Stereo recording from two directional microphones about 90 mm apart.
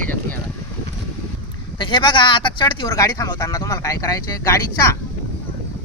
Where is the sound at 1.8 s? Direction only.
60° left (ahead or behind).